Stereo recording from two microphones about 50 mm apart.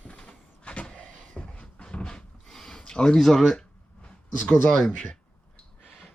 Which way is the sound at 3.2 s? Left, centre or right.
Centre.